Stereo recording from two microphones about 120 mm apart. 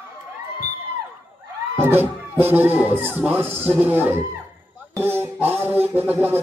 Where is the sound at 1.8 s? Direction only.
15° right (ahead or behind).